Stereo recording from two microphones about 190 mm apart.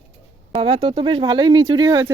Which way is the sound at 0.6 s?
25° right (ahead or behind).